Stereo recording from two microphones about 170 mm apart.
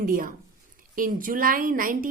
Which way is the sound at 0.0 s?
55° right (ahead or behind).